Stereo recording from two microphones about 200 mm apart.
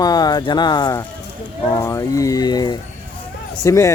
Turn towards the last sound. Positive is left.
turn(degrees=15)  # may be behind; listen again after turning